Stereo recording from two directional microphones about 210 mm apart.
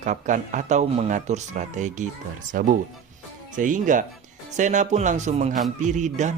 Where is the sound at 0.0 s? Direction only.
35° right (ahead or behind).